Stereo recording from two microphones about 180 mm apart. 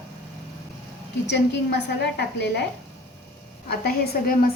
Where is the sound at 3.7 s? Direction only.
60° left (ahead or behind).